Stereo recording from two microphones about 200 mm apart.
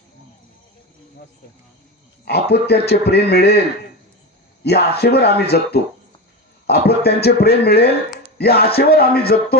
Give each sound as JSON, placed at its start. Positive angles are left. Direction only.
{"t": 2.2, "sound": "speech", "side_deg": 55}
{"t": 4.6, "sound": "speech", "side_deg": 55}